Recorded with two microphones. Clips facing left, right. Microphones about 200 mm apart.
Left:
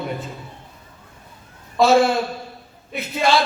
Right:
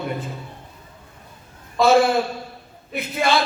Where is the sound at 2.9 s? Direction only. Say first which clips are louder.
Left 1 dB; 55° right (ahead or behind).